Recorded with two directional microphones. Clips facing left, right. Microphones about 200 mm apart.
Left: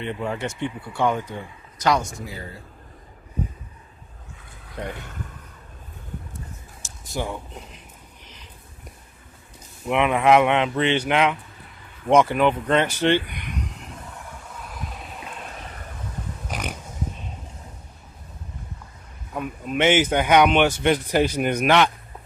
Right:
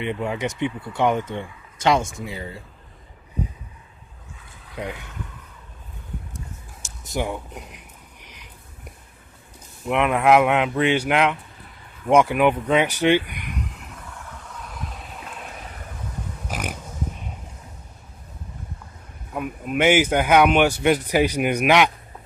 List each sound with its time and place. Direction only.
0.0 s speech: 15° right (ahead or behind)
7.1 s speech: 15° right (ahead or behind)
8.2 s a sound: 15° right (ahead or behind)
9.9 s speech: centre (ahead or behind)
16.5 s pig: 10° right (ahead or behind)
19.3 s speech: 5° right (ahead or behind)